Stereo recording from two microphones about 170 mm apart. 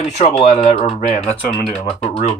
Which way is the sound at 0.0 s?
40° left (ahead or behind).